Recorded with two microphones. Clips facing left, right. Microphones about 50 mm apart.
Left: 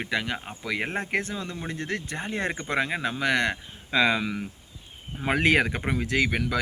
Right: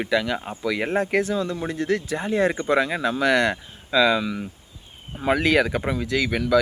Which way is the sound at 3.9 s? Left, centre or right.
Left.